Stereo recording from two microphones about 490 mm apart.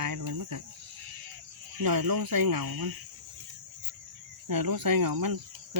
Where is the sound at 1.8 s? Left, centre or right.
Right.